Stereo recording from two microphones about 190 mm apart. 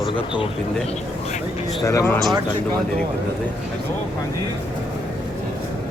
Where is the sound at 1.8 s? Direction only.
15° left (ahead or behind).